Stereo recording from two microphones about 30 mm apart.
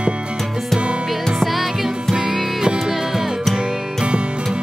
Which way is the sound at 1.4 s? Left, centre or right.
Centre.